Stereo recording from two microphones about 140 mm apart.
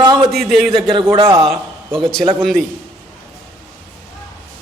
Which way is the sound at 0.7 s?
35° right (ahead or behind).